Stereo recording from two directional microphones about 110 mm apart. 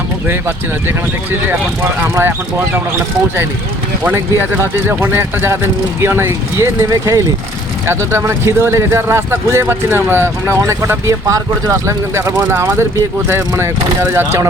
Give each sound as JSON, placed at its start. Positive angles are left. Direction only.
{"t": 0.3, "sound": "speech", "side_deg": -20}
{"t": 4.6, "sound": "speech", "side_deg": -20}